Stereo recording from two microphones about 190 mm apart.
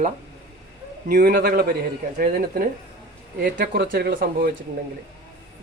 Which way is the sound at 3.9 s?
60° right (ahead or behind).